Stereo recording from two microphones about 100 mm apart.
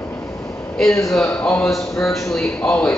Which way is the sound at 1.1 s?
5° left (ahead or behind).